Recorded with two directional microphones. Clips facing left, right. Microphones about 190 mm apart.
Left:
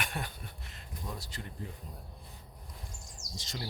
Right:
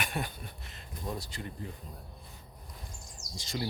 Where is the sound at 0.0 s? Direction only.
10° right (ahead or behind).